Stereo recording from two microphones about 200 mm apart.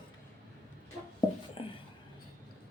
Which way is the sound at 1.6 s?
25° left (ahead or behind).